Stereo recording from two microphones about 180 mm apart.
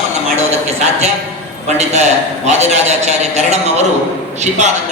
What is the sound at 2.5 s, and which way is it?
A man's voice, 40° right (ahead or behind).